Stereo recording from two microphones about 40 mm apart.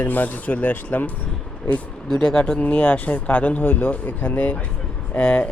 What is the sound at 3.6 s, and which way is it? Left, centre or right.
Speech, left.